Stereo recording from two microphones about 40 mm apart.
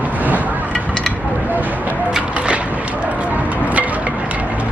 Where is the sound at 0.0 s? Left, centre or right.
Right.